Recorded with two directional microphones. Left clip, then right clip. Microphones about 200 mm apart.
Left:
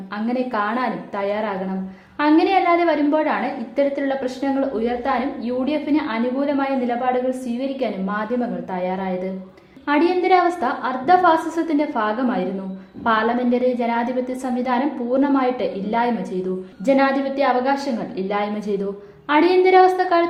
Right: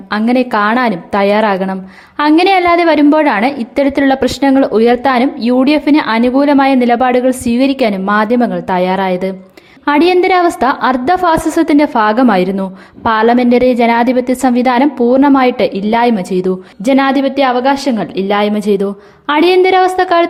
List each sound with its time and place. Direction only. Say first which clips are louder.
0.1 s a woman's voice: right 11 dB; 40° right (ahead or behind)